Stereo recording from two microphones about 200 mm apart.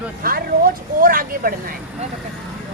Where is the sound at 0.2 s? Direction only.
45° right (ahead or behind).